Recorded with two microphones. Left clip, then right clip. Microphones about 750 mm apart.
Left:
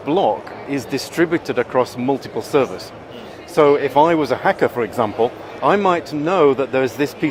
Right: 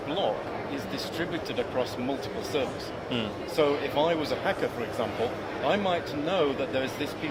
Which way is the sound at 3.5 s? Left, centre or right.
Left.